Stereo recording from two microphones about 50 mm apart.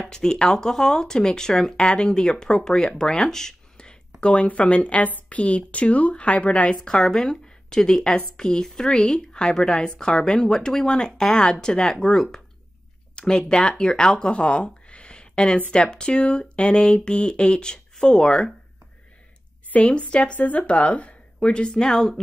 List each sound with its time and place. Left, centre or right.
0.0 s speech: centre
13.1 s a sound: centre
13.5 s speech: centre
19.7 s speech: left